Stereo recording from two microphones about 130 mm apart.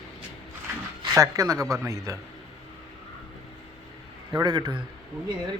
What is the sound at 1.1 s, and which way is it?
Speech, 25° right (ahead or behind).